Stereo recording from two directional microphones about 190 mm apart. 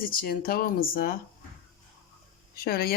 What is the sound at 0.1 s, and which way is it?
Speech, 50° left (ahead or behind).